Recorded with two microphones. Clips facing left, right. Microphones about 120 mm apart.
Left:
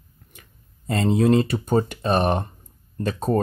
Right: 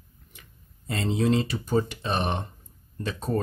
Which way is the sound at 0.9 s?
50° left (ahead or behind).